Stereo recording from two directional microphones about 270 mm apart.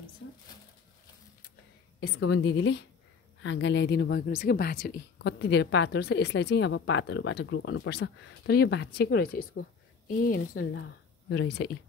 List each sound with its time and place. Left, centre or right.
2.1 s speech: left